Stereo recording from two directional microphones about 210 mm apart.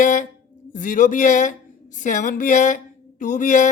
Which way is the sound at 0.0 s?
35° left (ahead or behind).